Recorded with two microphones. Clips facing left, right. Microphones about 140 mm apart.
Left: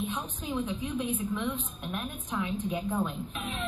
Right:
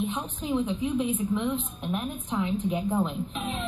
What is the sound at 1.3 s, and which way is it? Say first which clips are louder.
A woman's voice: right 5 dB; 15° right (ahead or behind).